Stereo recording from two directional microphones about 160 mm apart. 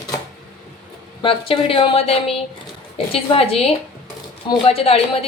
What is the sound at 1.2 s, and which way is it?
A woman's voice, 35° left (ahead or behind).